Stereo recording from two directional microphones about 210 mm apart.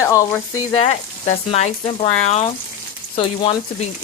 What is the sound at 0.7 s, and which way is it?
Speech, 30° left (ahead or behind).